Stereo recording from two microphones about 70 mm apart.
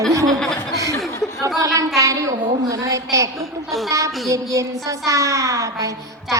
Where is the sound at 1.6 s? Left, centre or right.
Right.